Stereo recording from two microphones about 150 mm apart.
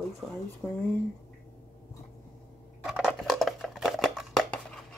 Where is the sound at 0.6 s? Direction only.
5° left (ahead or behind).